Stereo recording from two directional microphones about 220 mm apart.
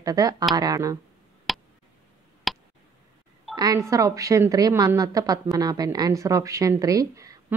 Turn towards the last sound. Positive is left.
turn(degrees=-15)  # may be behind; listen again after turning